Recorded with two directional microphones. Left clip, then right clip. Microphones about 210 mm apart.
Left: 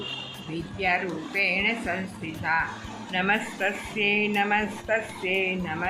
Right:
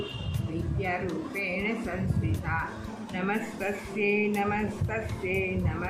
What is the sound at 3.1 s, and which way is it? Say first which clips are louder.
Speech: left 7 dB; 15° left (ahead or behind).